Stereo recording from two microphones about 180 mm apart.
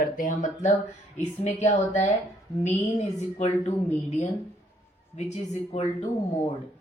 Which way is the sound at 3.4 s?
40° left (ahead or behind).